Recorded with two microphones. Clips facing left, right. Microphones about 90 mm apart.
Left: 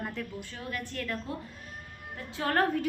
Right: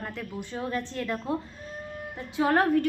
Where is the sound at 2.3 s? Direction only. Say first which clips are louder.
Right 5 dB; 15° right (ahead or behind).